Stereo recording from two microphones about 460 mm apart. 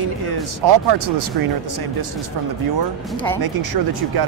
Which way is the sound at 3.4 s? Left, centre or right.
Right.